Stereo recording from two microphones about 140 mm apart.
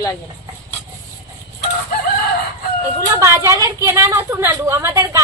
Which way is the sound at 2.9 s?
20° right (ahead or behind).